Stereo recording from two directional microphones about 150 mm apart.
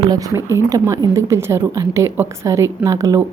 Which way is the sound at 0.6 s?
20° right (ahead or behind).